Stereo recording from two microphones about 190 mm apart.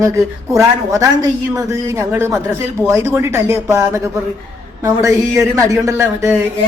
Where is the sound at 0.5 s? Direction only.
20° right (ahead or behind).